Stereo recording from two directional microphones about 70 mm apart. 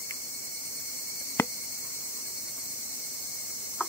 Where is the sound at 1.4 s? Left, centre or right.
Left.